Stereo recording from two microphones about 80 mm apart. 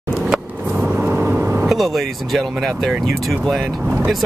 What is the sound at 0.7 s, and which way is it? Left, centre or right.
Vehicle, centre.